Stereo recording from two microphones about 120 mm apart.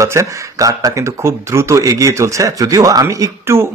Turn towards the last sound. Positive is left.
turn(degrees=-25)  # may be behind; listen again after turning